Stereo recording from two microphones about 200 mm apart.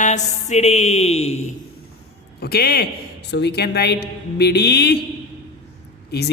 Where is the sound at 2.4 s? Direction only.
50° left (ahead or behind).